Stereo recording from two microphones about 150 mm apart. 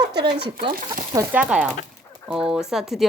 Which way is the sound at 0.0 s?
90° right.